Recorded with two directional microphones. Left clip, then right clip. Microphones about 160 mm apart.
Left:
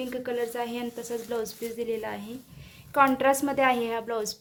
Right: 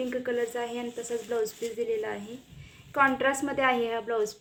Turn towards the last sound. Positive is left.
turn(degrees=20)  # may be behind; listen again after turning